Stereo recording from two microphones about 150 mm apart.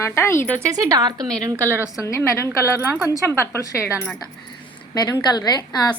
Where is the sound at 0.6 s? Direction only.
25° right (ahead or behind).